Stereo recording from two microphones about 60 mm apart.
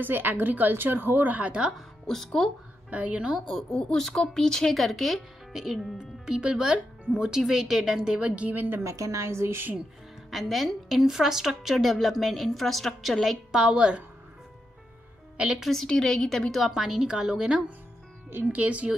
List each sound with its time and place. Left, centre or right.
0.0 s a woman's voice: right; by 1.7 s centre
2.0 s a woman's voice: centre
2.9 s a woman's voice: right
3.4 s a woman's voice: centre
3.8 s speech: centre; by 8.6 s right
8.8 s a woman's voice: right
10.3 s a woman's voice: centre
15.3 s a woman's voice: centre
15.7 s a woman's voice: centre; by 18.9 s right